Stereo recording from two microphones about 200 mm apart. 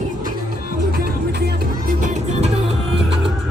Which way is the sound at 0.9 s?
50° right (ahead or behind).